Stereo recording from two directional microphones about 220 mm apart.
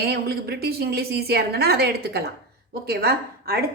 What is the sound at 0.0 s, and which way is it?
A woman's voice, 45° right (ahead or behind).